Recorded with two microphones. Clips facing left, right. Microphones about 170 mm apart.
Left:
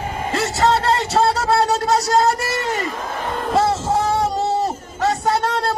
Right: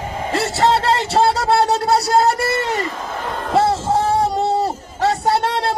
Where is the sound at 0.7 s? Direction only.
30° right (ahead or behind).